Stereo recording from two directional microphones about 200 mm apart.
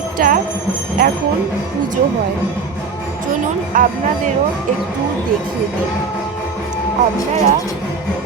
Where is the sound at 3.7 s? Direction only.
45° right (ahead or behind).